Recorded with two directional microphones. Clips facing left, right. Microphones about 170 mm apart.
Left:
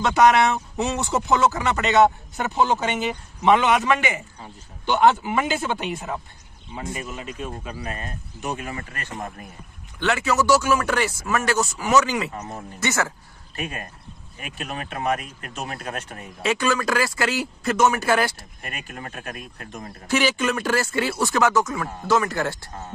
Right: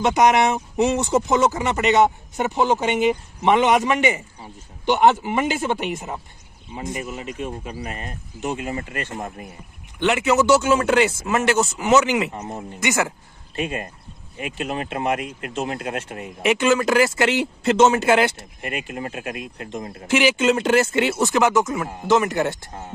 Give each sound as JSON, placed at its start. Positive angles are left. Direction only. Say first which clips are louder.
{"t": 0.0, "sound": "speech", "louder": "even", "side_deg": -15}